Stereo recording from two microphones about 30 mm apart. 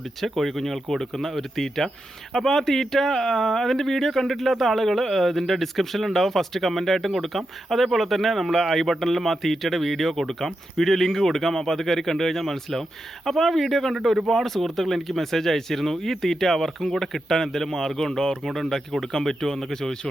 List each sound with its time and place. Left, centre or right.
0.2 s a man's voice: centre
13.9 s speech: centre
14.3 s a man's voice: centre